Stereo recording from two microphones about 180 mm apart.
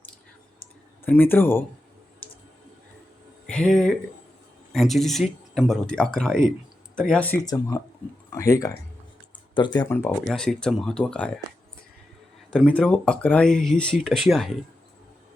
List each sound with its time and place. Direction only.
1.0 s speech: 10° left (ahead or behind)
3.4 s speech: 5° left (ahead or behind)
8.3 s speech: 15° left (ahead or behind)
10.2 s speech: 5° left (ahead or behind)
12.5 s speech: 5° left (ahead or behind)